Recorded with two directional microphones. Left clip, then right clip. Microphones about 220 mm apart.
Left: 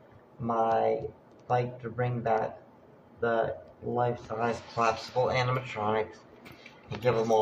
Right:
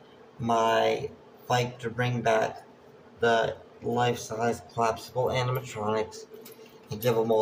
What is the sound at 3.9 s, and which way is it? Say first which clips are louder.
Speech: right 2 dB; 20° right (ahead or behind).